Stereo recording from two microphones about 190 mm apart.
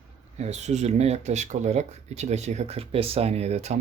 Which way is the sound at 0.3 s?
35° right (ahead or behind).